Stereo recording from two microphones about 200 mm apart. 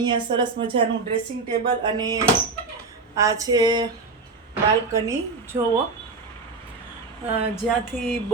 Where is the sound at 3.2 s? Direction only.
15° right (ahead or behind).